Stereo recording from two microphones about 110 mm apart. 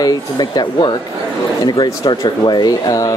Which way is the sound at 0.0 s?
40° left (ahead or behind).